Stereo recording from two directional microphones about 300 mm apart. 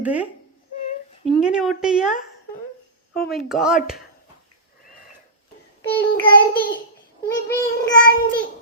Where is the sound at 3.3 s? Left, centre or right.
Centre.